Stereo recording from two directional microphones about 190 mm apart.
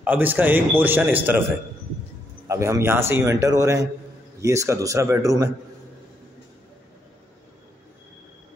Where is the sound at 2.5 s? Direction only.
15° right (ahead or behind).